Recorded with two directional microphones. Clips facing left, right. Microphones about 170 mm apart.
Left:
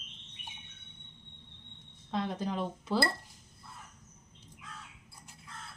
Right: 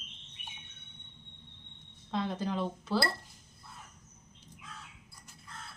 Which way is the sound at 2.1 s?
10° left (ahead or behind).